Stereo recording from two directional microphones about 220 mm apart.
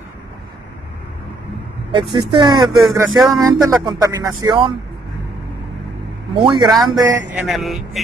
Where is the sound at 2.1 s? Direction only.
20° right (ahead or behind).